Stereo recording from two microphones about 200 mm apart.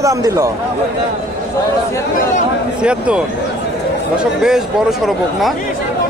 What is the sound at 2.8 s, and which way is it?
Speech, 5° right (ahead or behind).